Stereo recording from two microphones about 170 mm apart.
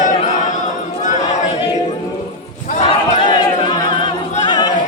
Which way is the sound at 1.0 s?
45° left (ahead or behind).